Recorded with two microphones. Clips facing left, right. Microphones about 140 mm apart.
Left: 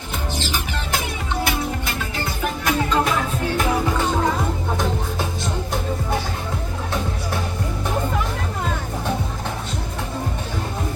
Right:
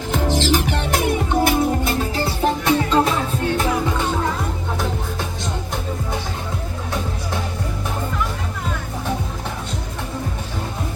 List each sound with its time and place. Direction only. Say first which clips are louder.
0.1 s music: right 8 dB; 90° right; by 3.7 s 30° right (ahead or behind)